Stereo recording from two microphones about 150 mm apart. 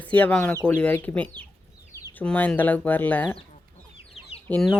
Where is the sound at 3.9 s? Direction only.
40° left (ahead or behind).